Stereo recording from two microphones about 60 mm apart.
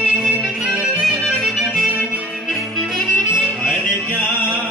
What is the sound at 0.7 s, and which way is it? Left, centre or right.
Music, right.